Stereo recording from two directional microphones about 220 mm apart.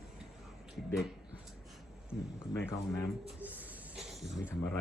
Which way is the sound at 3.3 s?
5° right (ahead or behind).